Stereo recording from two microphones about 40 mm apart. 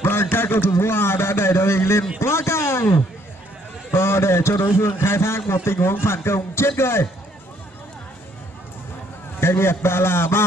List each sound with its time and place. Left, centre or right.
0.0 s a man's voice: left
2.4 s a sound: left
3.9 s a man's voice: left
9.4 s a man's voice: left